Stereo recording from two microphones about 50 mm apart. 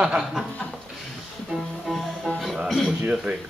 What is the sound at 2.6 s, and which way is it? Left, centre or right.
Speech, centre.